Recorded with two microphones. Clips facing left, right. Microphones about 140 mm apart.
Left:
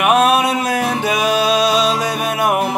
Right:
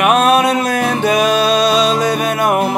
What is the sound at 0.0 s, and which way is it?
Music, 10° left (ahead or behind).